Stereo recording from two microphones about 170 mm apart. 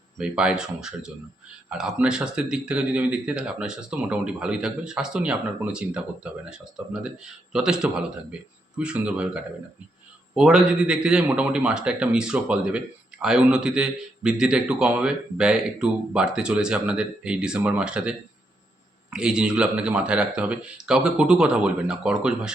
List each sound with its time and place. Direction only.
0.2 s speech: 5° right (ahead or behind)
19.1 s speech: 5° right (ahead or behind)